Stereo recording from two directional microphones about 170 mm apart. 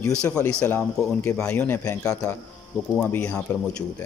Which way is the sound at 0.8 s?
5° left (ahead or behind).